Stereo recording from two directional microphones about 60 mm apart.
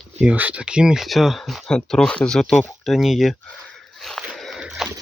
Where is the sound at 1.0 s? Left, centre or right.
Centre.